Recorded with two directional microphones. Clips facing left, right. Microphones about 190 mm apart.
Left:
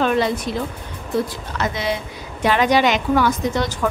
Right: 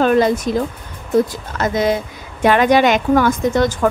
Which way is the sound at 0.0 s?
45° right (ahead or behind).